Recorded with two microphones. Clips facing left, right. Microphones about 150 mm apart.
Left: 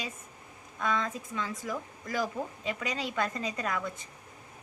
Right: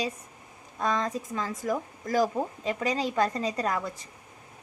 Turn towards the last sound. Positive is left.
turn(degrees=-35)  # may be behind; listen again after turning